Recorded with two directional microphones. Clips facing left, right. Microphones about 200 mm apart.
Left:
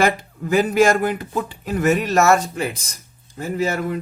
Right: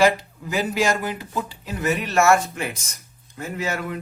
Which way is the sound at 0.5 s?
55° left (ahead or behind).